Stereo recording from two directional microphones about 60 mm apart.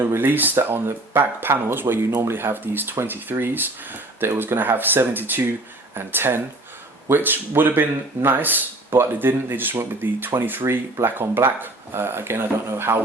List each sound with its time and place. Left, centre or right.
0.0 s speech: right